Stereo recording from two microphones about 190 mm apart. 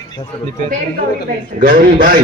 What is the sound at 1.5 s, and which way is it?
Speech, 45° right (ahead or behind).